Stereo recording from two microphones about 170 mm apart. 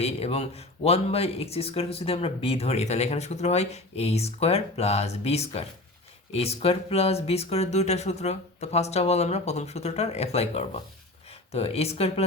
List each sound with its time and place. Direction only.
0.0 s speech: 35° left (ahead or behind)